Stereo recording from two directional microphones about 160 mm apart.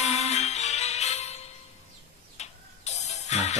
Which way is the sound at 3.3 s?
45° left (ahead or behind).